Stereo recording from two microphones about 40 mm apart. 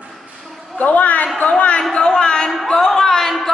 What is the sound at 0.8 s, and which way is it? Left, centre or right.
A woman's voice, left.